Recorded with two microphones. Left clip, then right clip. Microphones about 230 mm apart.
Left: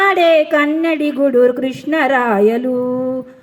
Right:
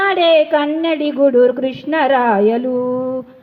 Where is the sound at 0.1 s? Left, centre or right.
Left.